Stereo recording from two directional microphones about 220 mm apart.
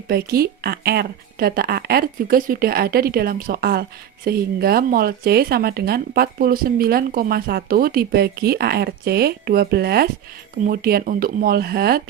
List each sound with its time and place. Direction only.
0.1 s speech: 45° right (ahead or behind)